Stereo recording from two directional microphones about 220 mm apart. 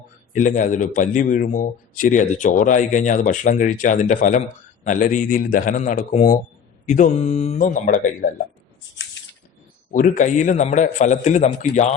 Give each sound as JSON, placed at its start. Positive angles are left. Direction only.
{"t": 0.3, "sound": "a man's voice", "side_deg": 35}
{"t": 9.9, "sound": "a man's voice", "side_deg": 35}